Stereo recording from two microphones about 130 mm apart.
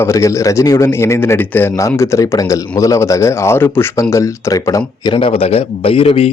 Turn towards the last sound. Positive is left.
turn(degrees=50)  # may be behind; listen again after turning